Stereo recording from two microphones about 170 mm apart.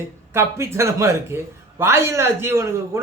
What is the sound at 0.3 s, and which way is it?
Speech, 15° right (ahead or behind).